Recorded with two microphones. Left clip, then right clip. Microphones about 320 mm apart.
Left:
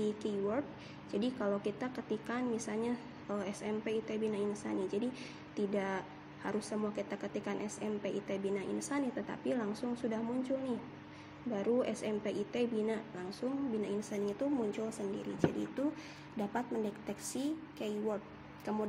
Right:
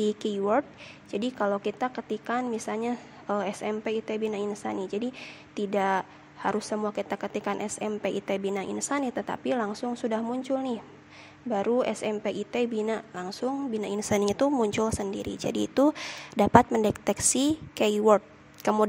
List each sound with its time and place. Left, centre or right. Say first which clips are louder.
0.0 s a woman's voice: right 8 dB; right